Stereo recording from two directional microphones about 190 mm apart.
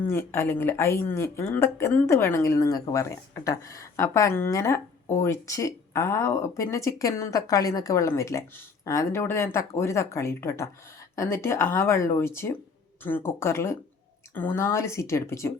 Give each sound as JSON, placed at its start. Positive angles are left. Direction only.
{"t": 0.0, "sound": "speech", "side_deg": 15}